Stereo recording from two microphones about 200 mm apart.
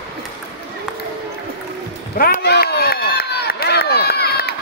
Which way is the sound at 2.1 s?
45° left (ahead or behind).